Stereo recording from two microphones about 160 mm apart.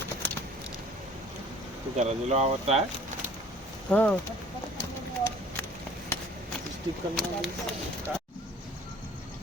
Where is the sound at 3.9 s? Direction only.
10° left (ahead or behind).